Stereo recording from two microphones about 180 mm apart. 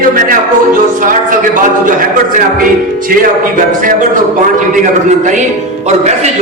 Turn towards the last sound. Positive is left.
turn(degrees=-45)  # may be behind; listen again after turning